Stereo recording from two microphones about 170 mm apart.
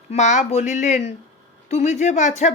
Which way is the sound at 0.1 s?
45° left (ahead or behind).